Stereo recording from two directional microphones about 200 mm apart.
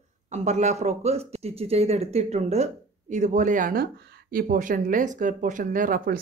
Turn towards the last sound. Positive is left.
turn(degrees=-45)  # may be behind; listen again after turning